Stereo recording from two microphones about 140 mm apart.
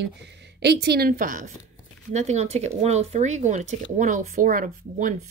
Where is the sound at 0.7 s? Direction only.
90° right.